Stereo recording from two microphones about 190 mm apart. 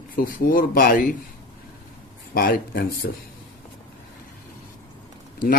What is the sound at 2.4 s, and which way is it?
Speech, 50° left (ahead or behind).